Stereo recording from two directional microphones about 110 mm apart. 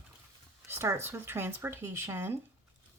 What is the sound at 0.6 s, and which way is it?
Speech, 20° right (ahead or behind).